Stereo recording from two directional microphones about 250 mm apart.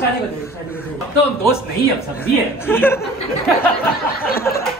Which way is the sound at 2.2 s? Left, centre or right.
Centre.